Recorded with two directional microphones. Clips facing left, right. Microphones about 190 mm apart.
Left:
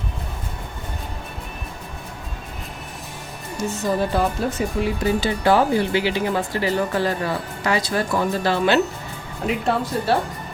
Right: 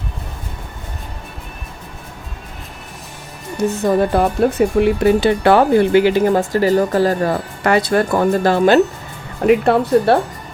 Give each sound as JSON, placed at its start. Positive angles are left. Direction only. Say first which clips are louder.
{"t": 3.6, "sound": "speech", "louder": "right 7 dB", "side_deg": -55}
{"t": 9.5, "sound": "speech", "louder": "right 10 dB", "side_deg": -60}